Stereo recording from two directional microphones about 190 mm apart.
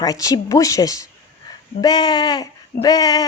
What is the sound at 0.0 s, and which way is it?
Speech, 20° left (ahead or behind).